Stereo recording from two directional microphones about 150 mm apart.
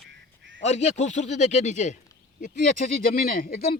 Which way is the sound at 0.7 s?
45° left (ahead or behind).